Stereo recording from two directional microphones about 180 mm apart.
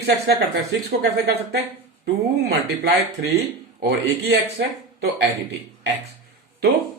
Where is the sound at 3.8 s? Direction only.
65° right (ahead or behind).